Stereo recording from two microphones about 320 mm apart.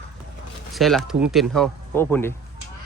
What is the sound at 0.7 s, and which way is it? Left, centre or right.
Speech, centre.